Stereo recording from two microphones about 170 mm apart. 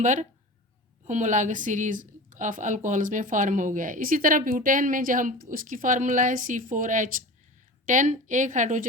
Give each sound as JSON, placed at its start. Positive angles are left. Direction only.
{"t": 0.0, "sound": "a woman's voice", "side_deg": -45}